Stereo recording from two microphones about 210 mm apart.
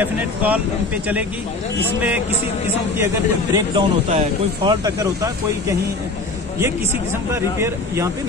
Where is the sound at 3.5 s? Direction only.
25° right (ahead or behind).